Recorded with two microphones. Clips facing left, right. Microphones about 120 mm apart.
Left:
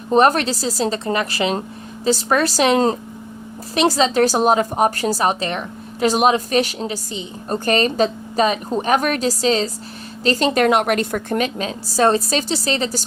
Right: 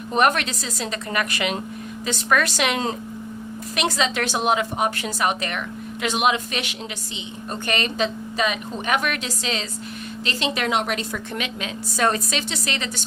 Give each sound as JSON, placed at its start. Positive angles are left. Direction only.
{"t": 0.1, "sound": "a woman's voice", "side_deg": 35}